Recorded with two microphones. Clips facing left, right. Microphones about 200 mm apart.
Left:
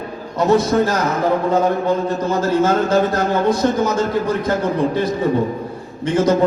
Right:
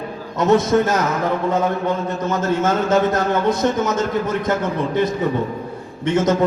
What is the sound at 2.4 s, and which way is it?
Speech, 20° right (ahead or behind).